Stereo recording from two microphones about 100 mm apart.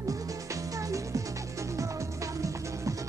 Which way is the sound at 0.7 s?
35° right (ahead or behind).